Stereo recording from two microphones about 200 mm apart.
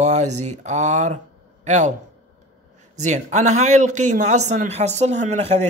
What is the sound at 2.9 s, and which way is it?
Speech, 35° right (ahead or behind).